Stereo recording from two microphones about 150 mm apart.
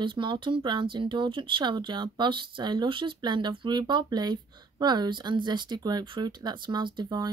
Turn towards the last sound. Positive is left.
turn(degrees=-30)  # may be behind; listen again after turning